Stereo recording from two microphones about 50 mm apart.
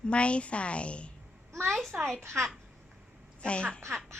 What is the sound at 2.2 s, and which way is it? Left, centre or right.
Speech, right.